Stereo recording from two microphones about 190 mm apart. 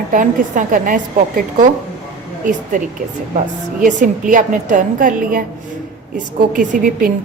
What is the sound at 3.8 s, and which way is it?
A woman's voice, 45° right (ahead or behind).